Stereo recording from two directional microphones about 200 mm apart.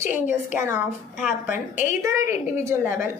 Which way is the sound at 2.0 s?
15° right (ahead or behind).